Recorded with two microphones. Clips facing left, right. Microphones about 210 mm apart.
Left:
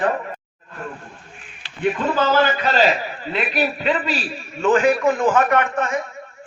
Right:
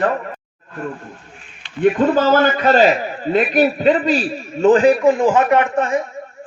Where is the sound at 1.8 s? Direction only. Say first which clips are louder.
Right 6 dB; 45° right (ahead or behind).